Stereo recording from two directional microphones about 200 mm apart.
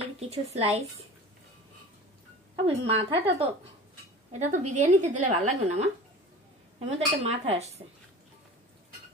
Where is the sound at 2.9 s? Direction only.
30° right (ahead or behind).